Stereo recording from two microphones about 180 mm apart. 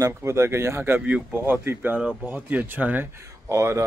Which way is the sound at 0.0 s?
15° right (ahead or behind).